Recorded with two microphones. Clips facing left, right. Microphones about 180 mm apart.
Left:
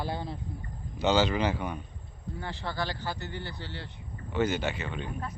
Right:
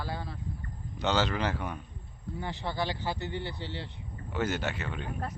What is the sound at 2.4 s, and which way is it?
Speech, 20° right (ahead or behind).